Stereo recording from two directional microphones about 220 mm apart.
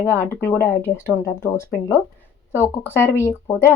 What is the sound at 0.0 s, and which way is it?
Speech, 10° left (ahead or behind).